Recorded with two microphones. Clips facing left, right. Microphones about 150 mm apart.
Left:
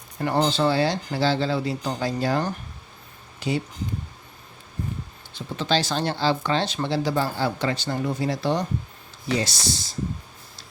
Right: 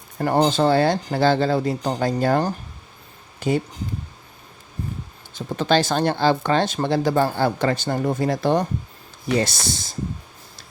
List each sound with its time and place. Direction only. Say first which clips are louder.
0.2 s speech: right 4 dB; 40° right (ahead or behind)
3.4 s speech: right 5 dB; 50° right (ahead or behind)
5.3 s speech: right 5 dB; 50° right (ahead or behind)